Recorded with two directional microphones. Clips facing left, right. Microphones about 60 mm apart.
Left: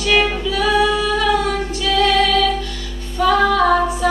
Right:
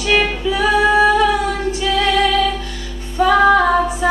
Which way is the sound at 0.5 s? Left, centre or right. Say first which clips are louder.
Right 4 dB; right.